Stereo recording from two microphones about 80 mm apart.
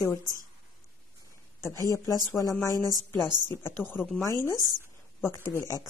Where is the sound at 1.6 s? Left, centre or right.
Left.